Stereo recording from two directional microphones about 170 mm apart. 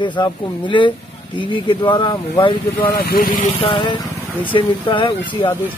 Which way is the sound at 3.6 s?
30° left (ahead or behind).